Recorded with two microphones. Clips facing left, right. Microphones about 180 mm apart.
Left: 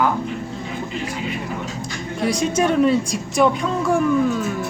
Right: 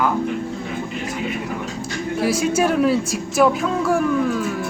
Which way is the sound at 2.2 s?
5° right (ahead or behind).